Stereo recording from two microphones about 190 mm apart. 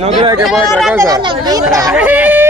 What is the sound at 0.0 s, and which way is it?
Speech, 35° right (ahead or behind).